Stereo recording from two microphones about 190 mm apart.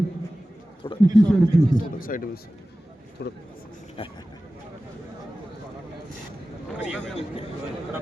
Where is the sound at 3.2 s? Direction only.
60° left (ahead or behind).